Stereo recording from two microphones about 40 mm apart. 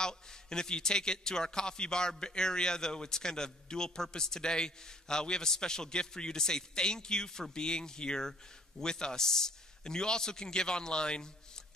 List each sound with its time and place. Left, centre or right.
0.0 s a man's voice: centre